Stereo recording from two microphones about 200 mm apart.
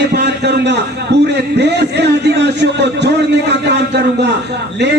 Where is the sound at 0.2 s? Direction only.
60° right (ahead or behind).